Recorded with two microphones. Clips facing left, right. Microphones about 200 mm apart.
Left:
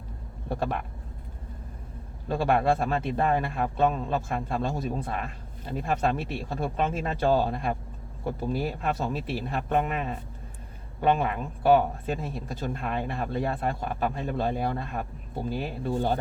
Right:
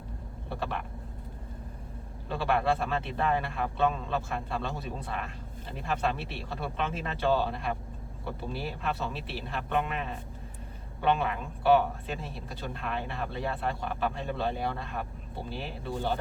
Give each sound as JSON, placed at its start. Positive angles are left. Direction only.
{"t": 0.5, "sound": "speech", "side_deg": 45}
{"t": 2.3, "sound": "speech", "side_deg": 45}